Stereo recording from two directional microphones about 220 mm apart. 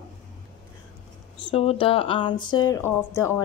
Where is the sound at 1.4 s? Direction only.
25° left (ahead or behind).